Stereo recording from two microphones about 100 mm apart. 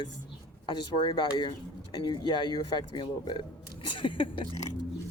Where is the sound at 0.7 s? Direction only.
50° left (ahead or behind).